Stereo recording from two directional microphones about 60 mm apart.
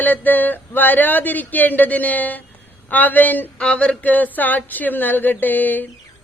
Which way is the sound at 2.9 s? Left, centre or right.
Left.